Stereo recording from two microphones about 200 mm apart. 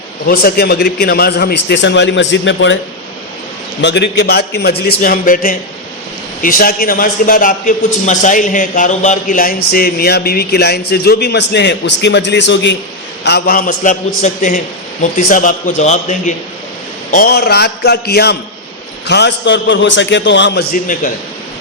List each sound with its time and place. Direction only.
0.3 s a man's voice: 50° left (ahead or behind); by 2.7 s 70° left (ahead or behind)
3.8 s a man's voice: 60° left (ahead or behind)
13.2 s a man's voice: 50° left (ahead or behind)
17.2 s a man's voice: 50° left (ahead or behind)
20.7 s a man's voice: 40° left (ahead or behind)